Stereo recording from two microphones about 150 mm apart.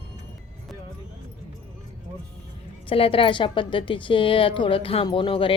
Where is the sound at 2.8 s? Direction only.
35° left (ahead or behind).